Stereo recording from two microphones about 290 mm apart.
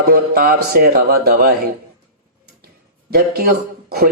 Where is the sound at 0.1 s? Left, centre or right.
Right.